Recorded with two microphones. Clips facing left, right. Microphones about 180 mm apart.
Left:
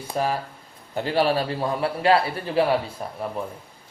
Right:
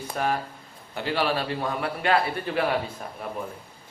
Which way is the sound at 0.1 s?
30° left (ahead or behind).